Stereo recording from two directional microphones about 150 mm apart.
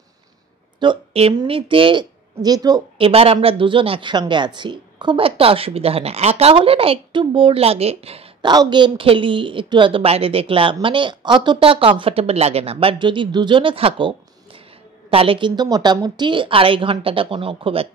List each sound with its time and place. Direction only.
0.7 s a sound: 35° right (ahead or behind)
1.3 s speech: 30° right (ahead or behind)
3.0 s speech: 40° right (ahead or behind)